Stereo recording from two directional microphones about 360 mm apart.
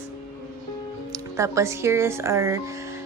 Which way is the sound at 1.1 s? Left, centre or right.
Centre.